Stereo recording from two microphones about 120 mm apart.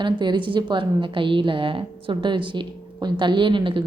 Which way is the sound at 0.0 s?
40° right (ahead or behind).